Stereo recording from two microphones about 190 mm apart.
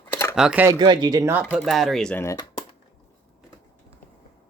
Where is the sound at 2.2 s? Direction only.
15° left (ahead or behind).